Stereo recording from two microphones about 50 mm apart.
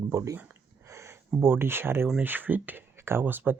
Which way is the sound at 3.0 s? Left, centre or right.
Right.